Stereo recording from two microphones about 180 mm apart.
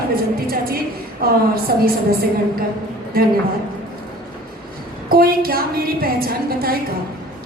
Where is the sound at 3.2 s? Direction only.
55° right (ahead or behind).